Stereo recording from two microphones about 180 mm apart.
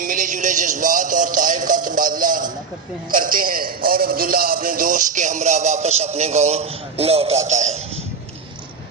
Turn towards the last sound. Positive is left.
turn(degrees=-40)  # may be behind; listen again after turning